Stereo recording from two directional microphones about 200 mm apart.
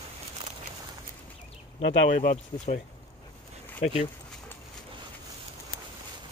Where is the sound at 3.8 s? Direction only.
30° left (ahead or behind).